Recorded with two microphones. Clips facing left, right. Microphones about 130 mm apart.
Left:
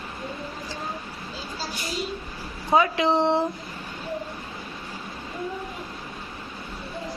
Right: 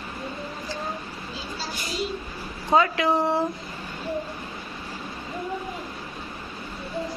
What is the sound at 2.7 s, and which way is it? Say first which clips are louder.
Speech: even; 15° left (ahead or behind).